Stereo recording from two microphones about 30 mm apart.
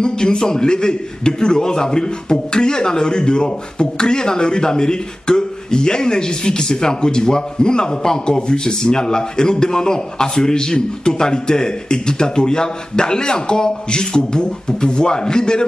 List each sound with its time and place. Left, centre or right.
0.0 s a man's voice: left